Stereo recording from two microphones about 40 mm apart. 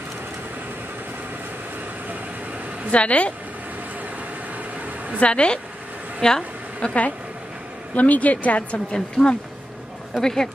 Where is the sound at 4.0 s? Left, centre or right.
Right.